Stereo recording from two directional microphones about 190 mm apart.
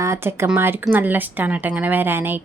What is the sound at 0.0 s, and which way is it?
Speech, 15° right (ahead or behind).